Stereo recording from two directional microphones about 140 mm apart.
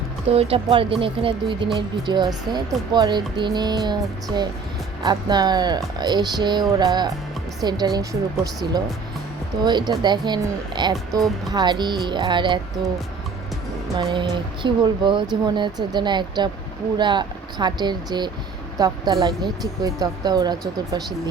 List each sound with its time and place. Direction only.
0.3 s speech: 45° right (ahead or behind)
13.9 s speech: 35° right (ahead or behind)